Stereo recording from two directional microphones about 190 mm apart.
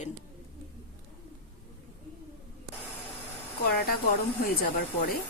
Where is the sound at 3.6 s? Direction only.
55° left (ahead or behind).